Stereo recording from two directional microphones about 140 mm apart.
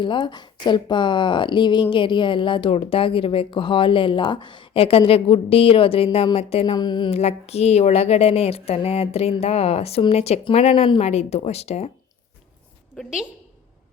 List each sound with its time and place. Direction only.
0.0 s speech: 35° left (ahead or behind)
6.7 s speech: 30° left (ahead or behind)
7.1 s speech: 50° left (ahead or behind)
13.0 s a woman's voice: 5° right (ahead or behind)